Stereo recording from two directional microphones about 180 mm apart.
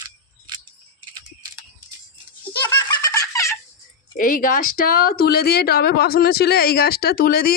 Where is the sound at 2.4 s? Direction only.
15° left (ahead or behind).